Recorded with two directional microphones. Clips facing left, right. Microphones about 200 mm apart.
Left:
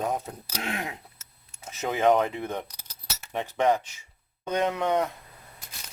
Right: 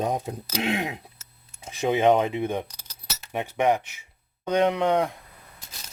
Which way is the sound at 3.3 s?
10° right (ahead or behind).